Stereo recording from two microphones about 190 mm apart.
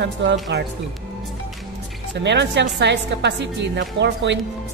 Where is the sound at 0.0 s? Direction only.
70° right (ahead or behind).